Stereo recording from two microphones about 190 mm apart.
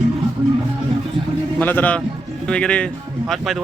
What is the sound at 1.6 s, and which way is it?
A man's voice, 10° left (ahead or behind).